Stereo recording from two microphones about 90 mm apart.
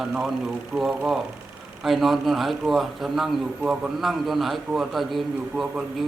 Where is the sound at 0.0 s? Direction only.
Centre (ahead or behind).